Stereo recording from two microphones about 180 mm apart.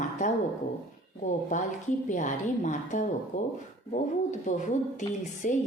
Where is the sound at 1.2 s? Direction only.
45° left (ahead or behind).